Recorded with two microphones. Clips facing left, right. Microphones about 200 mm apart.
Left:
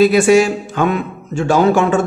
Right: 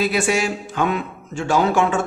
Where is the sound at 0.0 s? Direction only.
40° left (ahead or behind).